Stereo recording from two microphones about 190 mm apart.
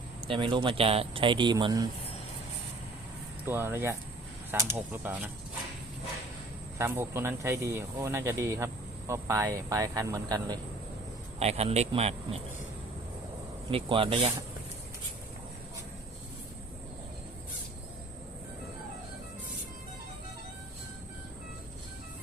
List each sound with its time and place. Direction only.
0.2 s a man's voice: 25° right (ahead or behind)
3.4 s speech: 10° right (ahead or behind)
6.7 s speech: 15° right (ahead or behind)
11.3 s a man's voice: 35° right (ahead or behind)
13.7 s a man's voice: 30° right (ahead or behind)